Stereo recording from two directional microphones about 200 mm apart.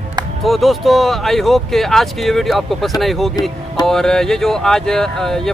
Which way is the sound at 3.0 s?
Centre (ahead or behind).